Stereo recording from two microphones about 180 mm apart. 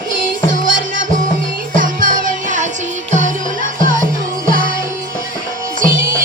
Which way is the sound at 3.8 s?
50° right (ahead or behind).